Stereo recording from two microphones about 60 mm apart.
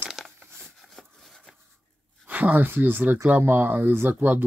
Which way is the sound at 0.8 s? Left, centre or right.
Centre.